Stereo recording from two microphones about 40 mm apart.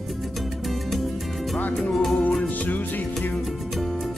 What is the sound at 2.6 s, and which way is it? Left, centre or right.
Music, left.